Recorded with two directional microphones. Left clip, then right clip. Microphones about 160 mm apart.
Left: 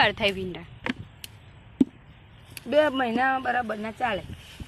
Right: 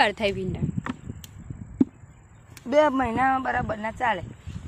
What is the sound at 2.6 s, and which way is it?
Speech, 75° right (ahead or behind).